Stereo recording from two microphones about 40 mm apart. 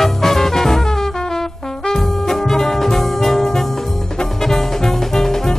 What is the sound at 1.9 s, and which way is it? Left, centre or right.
Brass instrument, centre.